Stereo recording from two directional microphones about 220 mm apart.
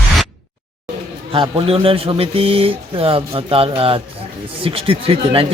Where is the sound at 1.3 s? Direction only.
25° right (ahead or behind).